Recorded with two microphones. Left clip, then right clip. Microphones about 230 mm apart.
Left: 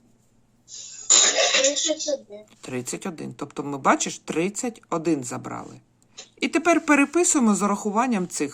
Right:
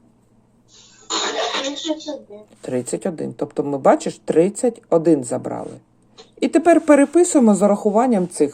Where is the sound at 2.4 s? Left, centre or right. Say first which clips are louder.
Right 8 dB; centre.